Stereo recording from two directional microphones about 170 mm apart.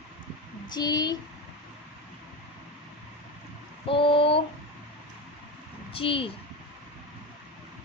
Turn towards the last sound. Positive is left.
turn(degrees=30)  # may be behind; listen again after turning